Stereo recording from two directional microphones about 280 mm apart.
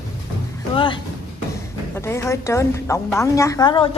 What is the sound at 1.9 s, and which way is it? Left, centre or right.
A woman's voice, centre.